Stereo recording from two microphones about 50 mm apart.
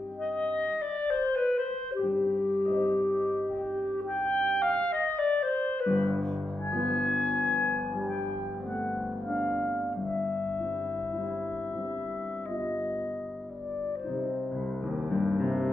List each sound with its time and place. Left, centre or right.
0.4 s clarinet: left
2.3 s music: centre
2.8 s music: left
4.2 s clarinet: left
6.8 s music: centre
9.3 s music: centre
15.3 s music: centre